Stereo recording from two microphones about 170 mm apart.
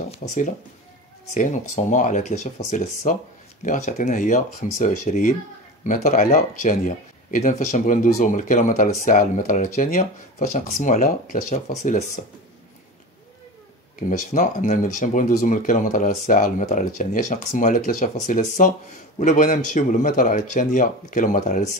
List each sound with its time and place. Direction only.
0.2 s speech: 45° left (ahead or behind)
13.9 s speech: 50° left (ahead or behind)